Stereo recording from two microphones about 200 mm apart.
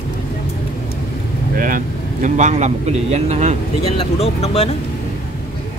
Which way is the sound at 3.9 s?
30° left (ahead or behind).